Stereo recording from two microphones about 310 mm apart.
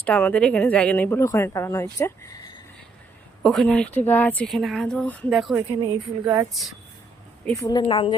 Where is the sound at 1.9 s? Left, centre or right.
Centre.